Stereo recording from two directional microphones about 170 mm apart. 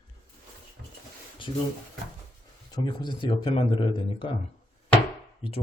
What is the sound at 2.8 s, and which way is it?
Speech, 30° left (ahead or behind).